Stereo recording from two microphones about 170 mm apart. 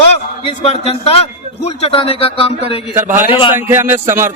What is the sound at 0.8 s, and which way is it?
Speech, 35° left (ahead or behind).